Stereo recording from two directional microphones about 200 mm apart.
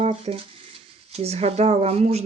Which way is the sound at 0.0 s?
30° right (ahead or behind).